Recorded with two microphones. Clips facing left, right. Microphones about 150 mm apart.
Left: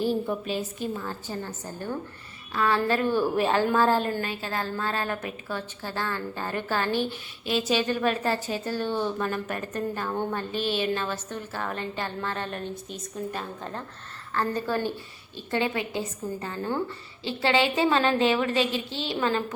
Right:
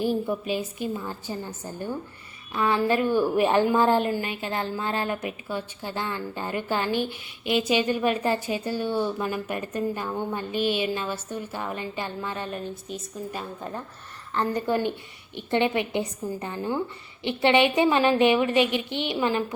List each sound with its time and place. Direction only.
0.0 s a woman's voice: 15° right (ahead or behind)
10.1 s a sound: centre (ahead or behind)
10.3 s a woman's voice: 15° right (ahead or behind)